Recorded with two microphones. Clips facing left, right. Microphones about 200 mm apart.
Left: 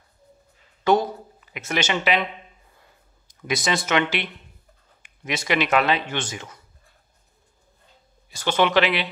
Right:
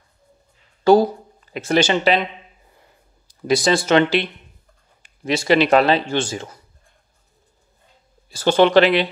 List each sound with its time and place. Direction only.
0.8 s speech: 35° right (ahead or behind)
2.6 s a sound: 25° right (ahead or behind)
3.4 s speech: 30° right (ahead or behind)
5.2 s speech: 30° right (ahead or behind)
8.4 s speech: 35° right (ahead or behind)